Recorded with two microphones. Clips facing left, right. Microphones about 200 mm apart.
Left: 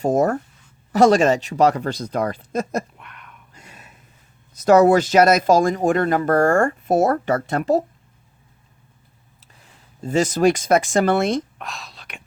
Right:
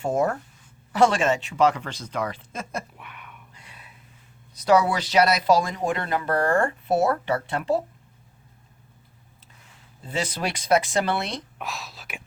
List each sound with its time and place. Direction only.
0.0 s speech: 40° left (ahead or behind)
3.0 s a sound: 5° right (ahead or behind)
3.5 s a sound: 45° left (ahead or behind)
4.5 s speech: 45° left (ahead or behind)
10.0 s speech: 45° left (ahead or behind)
11.5 s speech: centre (ahead or behind)